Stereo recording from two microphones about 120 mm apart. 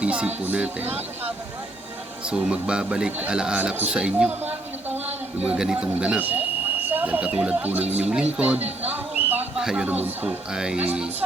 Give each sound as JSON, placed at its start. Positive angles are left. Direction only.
{"t": 0.0, "sound": "music", "side_deg": -10}
{"t": 0.4, "sound": "speech", "side_deg": -10}
{"t": 2.2, "sound": "speech", "side_deg": -10}
{"t": 8.9, "sound": "a sound", "side_deg": -15}
{"t": 9.6, "sound": "speech", "side_deg": -5}